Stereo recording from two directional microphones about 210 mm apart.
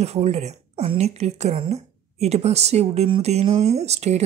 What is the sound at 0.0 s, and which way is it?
A woman's voice, 30° right (ahead or behind).